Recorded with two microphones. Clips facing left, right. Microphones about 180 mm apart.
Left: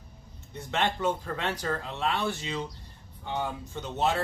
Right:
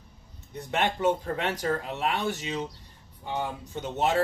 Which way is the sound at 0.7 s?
15° right (ahead or behind).